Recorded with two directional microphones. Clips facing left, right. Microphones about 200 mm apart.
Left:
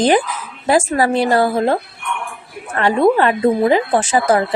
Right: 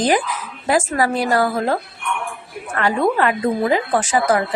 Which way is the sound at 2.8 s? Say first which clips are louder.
Left 4 dB; 30° left (ahead or behind).